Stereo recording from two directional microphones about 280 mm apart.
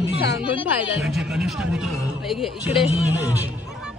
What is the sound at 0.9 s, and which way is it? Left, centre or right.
A man's voice, centre.